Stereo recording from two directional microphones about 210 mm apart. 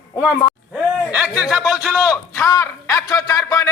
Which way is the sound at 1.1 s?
5° right (ahead or behind).